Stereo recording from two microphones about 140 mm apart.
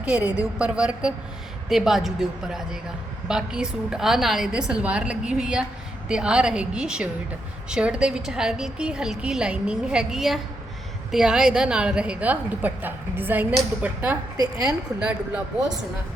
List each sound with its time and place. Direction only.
0.0 s a woman's voice: 10° right (ahead or behind)
14.3 s a woman's voice: 30° right (ahead or behind)
14.7 s a woman's voice: 10° right (ahead or behind)